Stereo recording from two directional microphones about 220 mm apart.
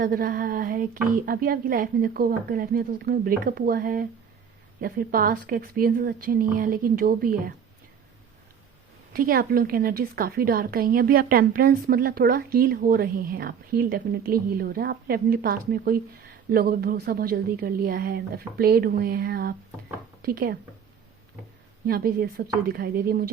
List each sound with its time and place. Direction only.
0.0 s a woman's voice: 40° right (ahead or behind)
9.1 s a woman's voice: 40° right (ahead or behind)
21.8 s a woman's voice: 45° right (ahead or behind)